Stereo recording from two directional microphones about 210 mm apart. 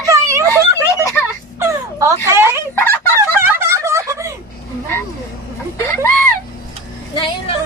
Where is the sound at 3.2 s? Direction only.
10° right (ahead or behind).